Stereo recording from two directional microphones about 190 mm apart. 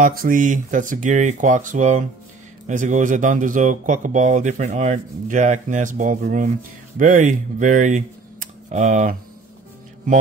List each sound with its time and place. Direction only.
0.0 s speech: 45° right (ahead or behind)